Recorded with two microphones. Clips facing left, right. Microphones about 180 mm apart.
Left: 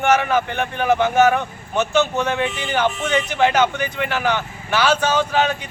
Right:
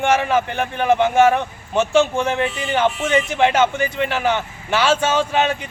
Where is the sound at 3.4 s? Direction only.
25° right (ahead or behind).